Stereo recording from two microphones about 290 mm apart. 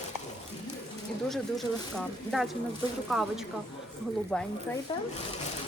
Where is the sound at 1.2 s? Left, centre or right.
Centre.